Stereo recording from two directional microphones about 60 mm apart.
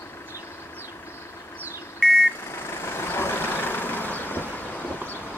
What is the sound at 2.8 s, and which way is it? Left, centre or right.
Vehicle, left.